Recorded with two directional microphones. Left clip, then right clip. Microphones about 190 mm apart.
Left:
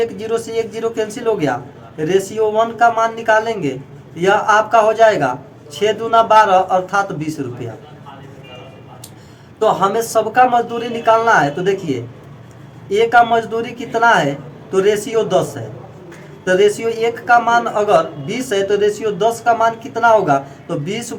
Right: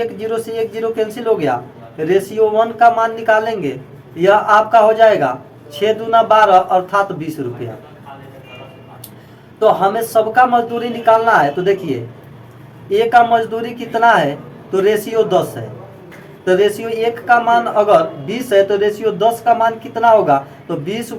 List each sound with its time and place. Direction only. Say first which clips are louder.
0.0 s a man's voice: left 1 dB; 15° left (ahead or behind)
9.6 s a man's voice: right 2 dB; 15° left (ahead or behind)